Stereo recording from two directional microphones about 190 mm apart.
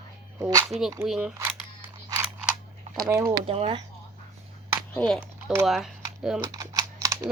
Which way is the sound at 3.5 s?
30° right (ahead or behind).